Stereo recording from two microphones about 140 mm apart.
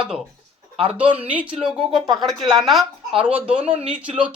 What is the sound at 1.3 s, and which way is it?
Speech, 10° right (ahead or behind).